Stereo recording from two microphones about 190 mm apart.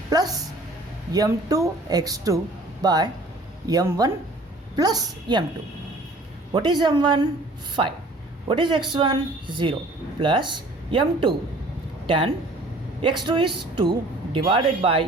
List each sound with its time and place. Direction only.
0.1 s a woman's voice: 20° right (ahead or behind)
6.5 s a woman's voice: 20° right (ahead or behind)